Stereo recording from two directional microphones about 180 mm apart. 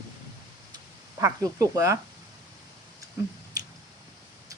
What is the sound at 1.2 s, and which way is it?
Speech, 20° right (ahead or behind).